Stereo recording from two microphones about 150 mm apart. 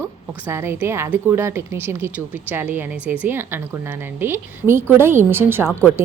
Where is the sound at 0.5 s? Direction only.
15° right (ahead or behind).